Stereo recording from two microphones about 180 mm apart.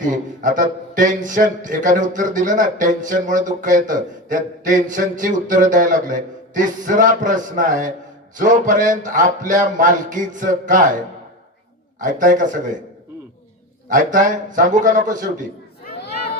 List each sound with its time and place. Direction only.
0.0 s speech: 45° right (ahead or behind)
11.9 s speech: 45° right (ahead or behind)
13.9 s speech: 45° right (ahead or behind)
15.9 s a sound: 60° left (ahead or behind)